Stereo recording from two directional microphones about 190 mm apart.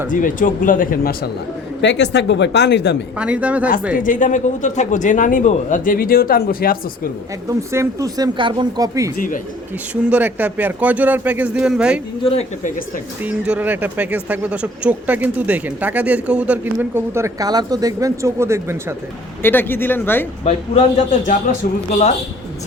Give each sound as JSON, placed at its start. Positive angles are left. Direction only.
{"t": 0.1, "sound": "speech", "side_deg": 45}
{"t": 1.8, "sound": "speech", "side_deg": 65}
{"t": 3.2, "sound": "speech", "side_deg": -5}
{"t": 3.9, "sound": "speech", "side_deg": 45}
{"t": 7.4, "sound": "speech", "side_deg": -15}
{"t": 9.1, "sound": "speech", "side_deg": 45}
{"t": 9.9, "sound": "speech", "side_deg": -5}
{"t": 12.2, "sound": "speech", "side_deg": 35}
{"t": 13.2, "sound": "speech", "side_deg": -5}
{"t": 19.4, "sound": "speech", "side_deg": 10}
{"t": 20.4, "sound": "speech", "side_deg": 35}